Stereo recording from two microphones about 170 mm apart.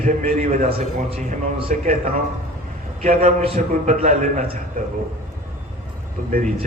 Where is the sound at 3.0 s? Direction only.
55° right (ahead or behind).